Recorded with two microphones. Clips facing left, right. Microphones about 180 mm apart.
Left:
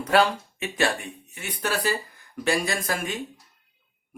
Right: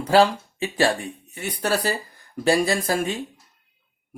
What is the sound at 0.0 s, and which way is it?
Speech, 30° right (ahead or behind).